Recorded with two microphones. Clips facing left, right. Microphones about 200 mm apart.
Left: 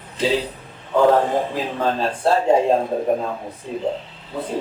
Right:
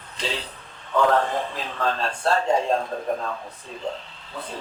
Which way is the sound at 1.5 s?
15° left (ahead or behind).